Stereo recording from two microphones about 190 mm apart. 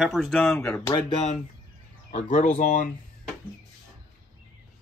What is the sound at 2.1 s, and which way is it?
Speech, 35° left (ahead or behind).